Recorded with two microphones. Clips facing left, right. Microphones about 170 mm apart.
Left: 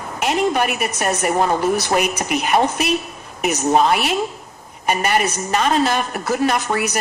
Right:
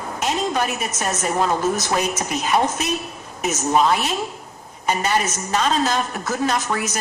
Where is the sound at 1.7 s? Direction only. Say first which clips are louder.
Left 3 dB; 65° left (ahead or behind).